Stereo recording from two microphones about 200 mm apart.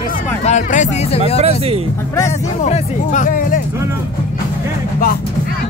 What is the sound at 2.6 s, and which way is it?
Speech, 35° left (ahead or behind).